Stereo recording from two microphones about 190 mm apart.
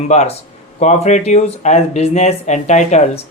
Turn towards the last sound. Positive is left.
turn(degrees=35)  # may be behind; listen again after turning